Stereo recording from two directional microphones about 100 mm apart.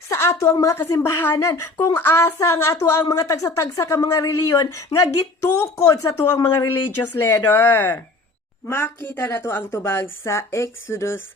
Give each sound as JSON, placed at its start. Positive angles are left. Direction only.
{"t": 0.1, "sound": "a woman's voice", "side_deg": 30}
{"t": 6.7, "sound": "a woman's voice", "side_deg": 20}